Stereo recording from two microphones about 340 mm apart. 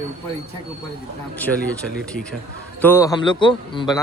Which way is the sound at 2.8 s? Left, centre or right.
Centre.